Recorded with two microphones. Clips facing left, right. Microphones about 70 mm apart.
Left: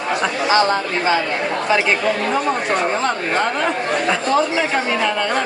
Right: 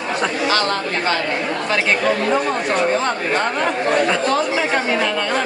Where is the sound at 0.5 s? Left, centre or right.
Centre.